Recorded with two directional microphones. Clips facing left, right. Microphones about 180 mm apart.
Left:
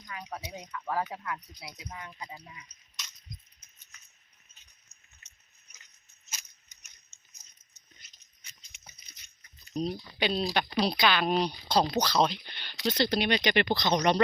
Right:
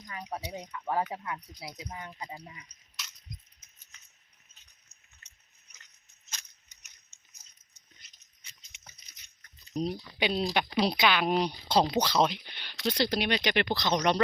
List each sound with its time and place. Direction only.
0.0 s keys jangling: 25° right (ahead or behind)
0.3 s speech: 25° right (ahead or behind)
9.7 s speech: 15° right (ahead or behind); by 14.2 s 5° left (ahead or behind)